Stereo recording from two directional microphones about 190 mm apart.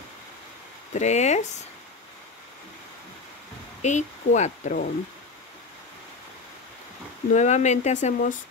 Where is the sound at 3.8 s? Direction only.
40° left (ahead or behind).